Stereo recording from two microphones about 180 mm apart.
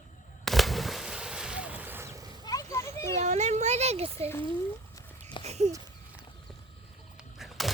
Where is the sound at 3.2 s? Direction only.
40° right (ahead or behind).